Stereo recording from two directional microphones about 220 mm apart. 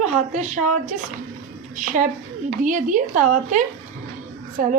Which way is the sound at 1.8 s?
35° right (ahead or behind).